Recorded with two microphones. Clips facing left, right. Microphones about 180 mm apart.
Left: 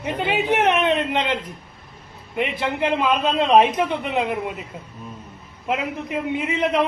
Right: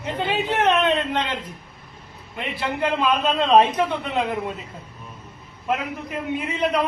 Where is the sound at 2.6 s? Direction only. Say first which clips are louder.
Right 1 dB; 15° left (ahead or behind).